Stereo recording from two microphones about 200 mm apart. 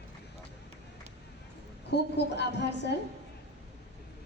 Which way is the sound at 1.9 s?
60° left (ahead or behind).